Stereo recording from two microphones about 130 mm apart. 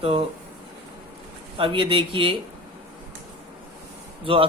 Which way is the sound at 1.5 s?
40° right (ahead or behind).